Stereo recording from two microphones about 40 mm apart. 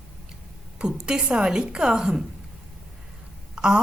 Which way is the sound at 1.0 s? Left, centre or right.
Right.